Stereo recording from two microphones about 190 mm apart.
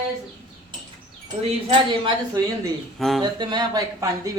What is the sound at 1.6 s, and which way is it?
A woman's voice, 25° right (ahead or behind).